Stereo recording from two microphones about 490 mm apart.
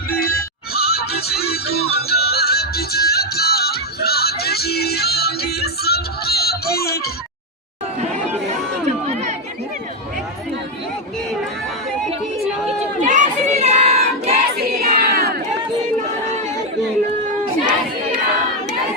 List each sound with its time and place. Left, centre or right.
0.1 s music: centre
12.6 s crowd: centre
17.4 s crowd: centre